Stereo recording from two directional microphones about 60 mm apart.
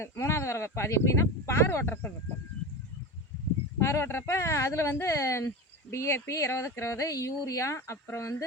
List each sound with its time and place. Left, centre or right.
0.0 s speech: left
3.8 s speech: left
7.8 s speech: left
8.1 s speech: left